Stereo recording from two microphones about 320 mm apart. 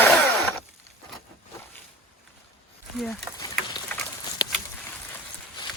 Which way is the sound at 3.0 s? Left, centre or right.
Centre.